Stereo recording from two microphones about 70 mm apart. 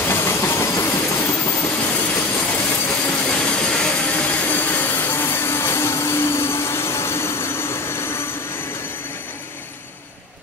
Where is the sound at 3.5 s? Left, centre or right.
Centre.